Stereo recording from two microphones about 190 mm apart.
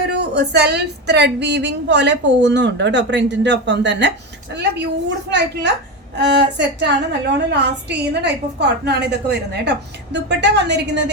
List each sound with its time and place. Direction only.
0.1 s a woman's voice: 60° right (ahead or behind)